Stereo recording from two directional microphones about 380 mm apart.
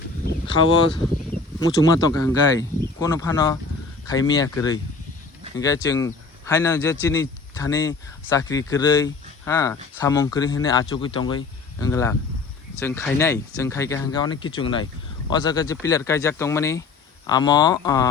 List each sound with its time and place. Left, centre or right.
0.4 s speech: centre